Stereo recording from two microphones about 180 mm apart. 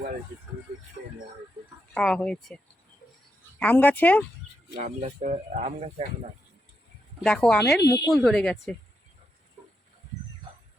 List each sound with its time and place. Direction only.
1.9 s speech: 5° left (ahead or behind)
3.6 s speech: 10° left (ahead or behind)
4.8 s speech: 35° right (ahead or behind)
7.2 s speech: 5° left (ahead or behind)
7.9 s speech: 20° left (ahead or behind)
8.1 s speech: centre (ahead or behind)